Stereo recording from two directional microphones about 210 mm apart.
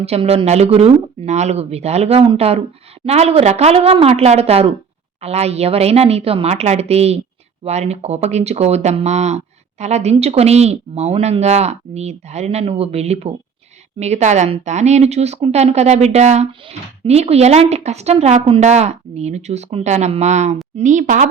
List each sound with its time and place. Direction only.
0.0 s speech: 30° right (ahead or behind)